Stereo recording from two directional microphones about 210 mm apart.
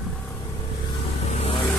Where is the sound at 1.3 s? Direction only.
30° left (ahead or behind).